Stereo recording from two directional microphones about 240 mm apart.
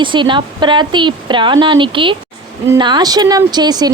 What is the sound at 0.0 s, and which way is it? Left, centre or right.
A woman's voice, centre.